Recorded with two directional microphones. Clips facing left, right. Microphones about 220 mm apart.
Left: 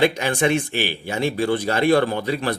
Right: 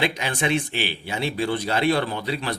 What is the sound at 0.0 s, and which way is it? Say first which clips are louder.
Speech: left 6 dB; 45° left (ahead or behind).